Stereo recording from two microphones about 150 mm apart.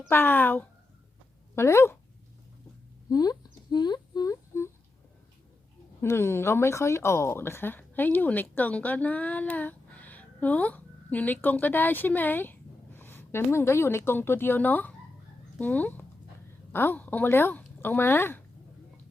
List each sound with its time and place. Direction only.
0.1 s speech: 15° left (ahead or behind)
3.1 s humming: 25° left (ahead or behind)
6.0 s speech: 15° left (ahead or behind)